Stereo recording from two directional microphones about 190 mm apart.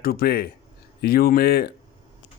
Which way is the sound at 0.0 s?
55° left (ahead or behind).